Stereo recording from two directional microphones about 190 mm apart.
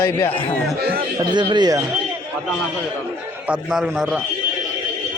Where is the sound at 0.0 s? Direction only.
10° left (ahead or behind).